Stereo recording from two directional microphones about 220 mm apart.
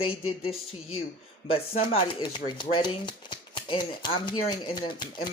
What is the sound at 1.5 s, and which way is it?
Speech, 25° left (ahead or behind).